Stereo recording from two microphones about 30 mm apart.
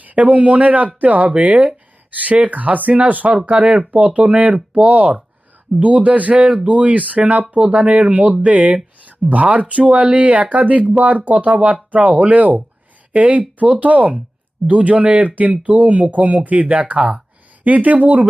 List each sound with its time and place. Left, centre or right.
0.0 s speech: right
3.5 s speech: right
3.9 s speech: right
16.7 s speech: right
17.6 s speech: right